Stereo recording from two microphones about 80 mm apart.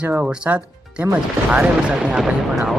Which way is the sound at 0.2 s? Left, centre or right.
Centre.